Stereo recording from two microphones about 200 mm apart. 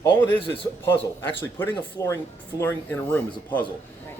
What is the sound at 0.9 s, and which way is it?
A man's voice, 10° left (ahead or behind).